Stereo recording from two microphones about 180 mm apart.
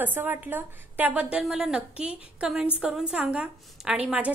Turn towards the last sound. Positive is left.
turn(degrees=-10)  # may be behind; listen again after turning